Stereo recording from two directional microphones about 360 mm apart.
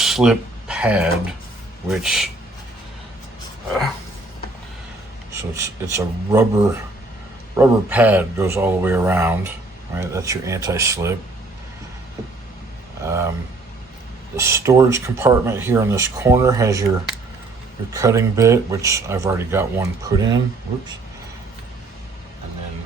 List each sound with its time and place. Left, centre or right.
0.0 s a sound: centre
1.9 s speech: centre
5.3 s speech: centre
13.1 s speech: centre
14.4 s speech: centre
17.9 s speech: centre